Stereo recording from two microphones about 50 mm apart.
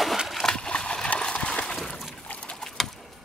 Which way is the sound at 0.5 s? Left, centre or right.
Centre.